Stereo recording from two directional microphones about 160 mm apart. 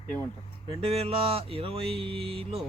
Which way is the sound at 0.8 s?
35° right (ahead or behind).